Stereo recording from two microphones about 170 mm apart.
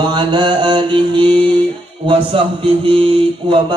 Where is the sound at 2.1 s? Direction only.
30° right (ahead or behind).